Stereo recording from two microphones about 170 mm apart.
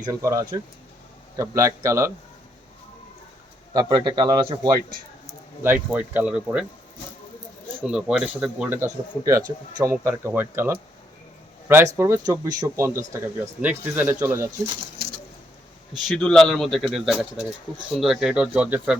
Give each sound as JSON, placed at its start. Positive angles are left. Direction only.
{"t": 0.0, "sound": "a man's voice", "side_deg": -20}
{"t": 3.8, "sound": "a man's voice", "side_deg": -25}
{"t": 5.6, "sound": "speech", "side_deg": -10}
{"t": 7.9, "sound": "speech", "side_deg": -5}
{"t": 16.0, "sound": "a man's voice", "side_deg": 5}